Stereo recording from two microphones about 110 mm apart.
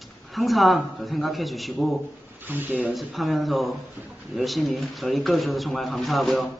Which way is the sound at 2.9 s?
Centre (ahead or behind).